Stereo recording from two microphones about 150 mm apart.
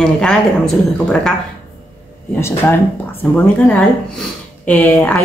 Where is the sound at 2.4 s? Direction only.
15° left (ahead or behind).